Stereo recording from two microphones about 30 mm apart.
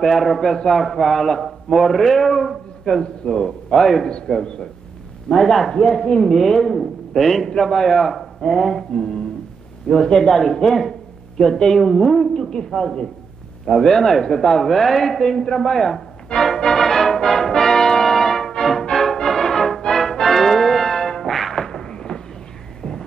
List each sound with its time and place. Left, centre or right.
0.0 s a man's voice: centre
2.9 s speech: centre
3.7 s speech: centre
5.4 s a man's voice: centre
5.7 s a man's voice: centre
12.4 s a man's voice: left
13.7 s speech: centre
16.3 s music: centre
21.6 s a sound: left